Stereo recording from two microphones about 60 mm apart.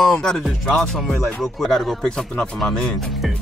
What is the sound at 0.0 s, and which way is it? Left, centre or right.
Speech, centre.